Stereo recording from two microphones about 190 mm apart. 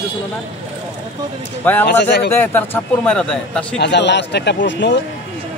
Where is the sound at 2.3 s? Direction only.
10° left (ahead or behind).